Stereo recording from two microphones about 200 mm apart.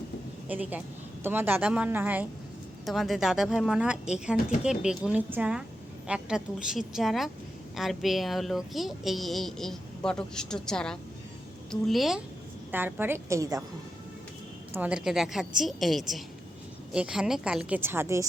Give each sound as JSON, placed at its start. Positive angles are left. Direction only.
{"t": 0.4, "sound": "a woman's voice", "side_deg": -10}
{"t": 14.7, "sound": "speech", "side_deg": -5}